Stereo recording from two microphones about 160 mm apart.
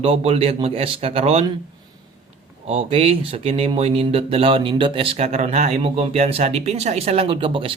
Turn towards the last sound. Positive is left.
turn(degrees=-35)  # may be behind; listen again after turning